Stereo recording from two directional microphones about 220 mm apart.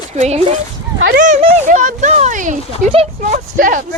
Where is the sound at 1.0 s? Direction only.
45° right (ahead or behind).